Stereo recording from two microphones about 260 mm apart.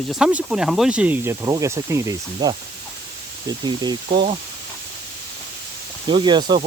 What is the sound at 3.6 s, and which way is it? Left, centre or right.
Speech, centre.